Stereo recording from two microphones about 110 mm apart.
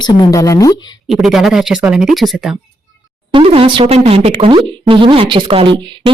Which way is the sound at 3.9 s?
70° right (ahead or behind).